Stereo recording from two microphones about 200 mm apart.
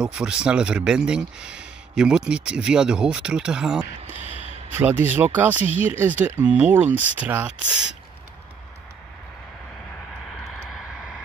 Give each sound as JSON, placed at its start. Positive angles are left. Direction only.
{"t": 0.0, "sound": "speech", "side_deg": -5}
{"t": 4.3, "sound": "a sound", "side_deg": 30}
{"t": 4.7, "sound": "speech", "side_deg": -10}